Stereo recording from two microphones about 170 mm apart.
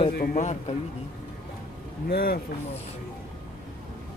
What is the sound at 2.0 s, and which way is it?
Speech, 65° left (ahead or behind).